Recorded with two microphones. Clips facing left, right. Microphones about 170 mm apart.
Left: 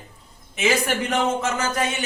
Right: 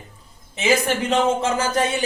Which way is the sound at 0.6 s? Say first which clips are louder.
Right 2 dB; 25° right (ahead or behind).